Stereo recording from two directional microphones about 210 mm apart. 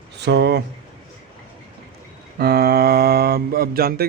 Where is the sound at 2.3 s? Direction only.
50° right (ahead or behind).